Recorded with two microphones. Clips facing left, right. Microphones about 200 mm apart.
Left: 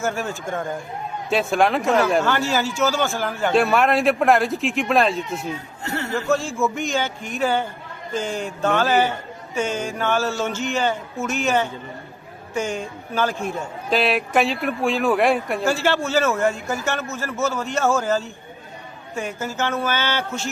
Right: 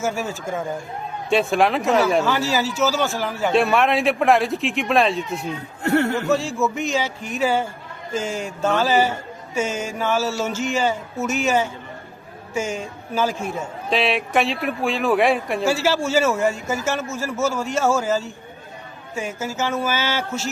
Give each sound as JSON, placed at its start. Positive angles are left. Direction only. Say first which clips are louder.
{"t": 0.0, "sound": "speech", "louder": "even", "side_deg": -5}
{"t": 5.8, "sound": "a sound", "louder": "right 10 dB", "side_deg": -60}
{"t": 6.2, "sound": "speech", "louder": "right 1 dB", "side_deg": 0}